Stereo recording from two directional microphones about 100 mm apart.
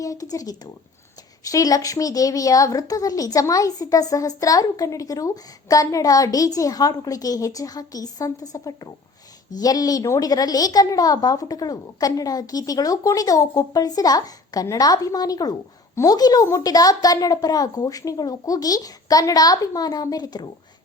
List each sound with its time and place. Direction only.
0.0 s a woman's voice: 35° left (ahead or behind)